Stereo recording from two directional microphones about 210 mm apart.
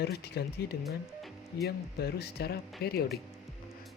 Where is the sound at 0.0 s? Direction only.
50° left (ahead or behind).